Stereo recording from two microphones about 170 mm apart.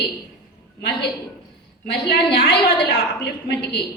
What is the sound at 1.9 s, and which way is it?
A woman's voice, 80° left.